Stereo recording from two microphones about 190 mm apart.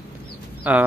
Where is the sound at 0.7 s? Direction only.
10° right (ahead or behind).